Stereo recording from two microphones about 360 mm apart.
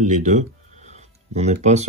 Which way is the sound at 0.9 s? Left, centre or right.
Centre.